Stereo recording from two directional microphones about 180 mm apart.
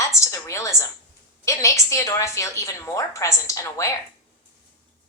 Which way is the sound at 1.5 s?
15° left (ahead or behind).